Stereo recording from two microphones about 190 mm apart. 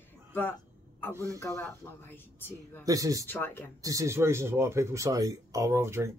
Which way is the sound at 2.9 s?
20° right (ahead or behind).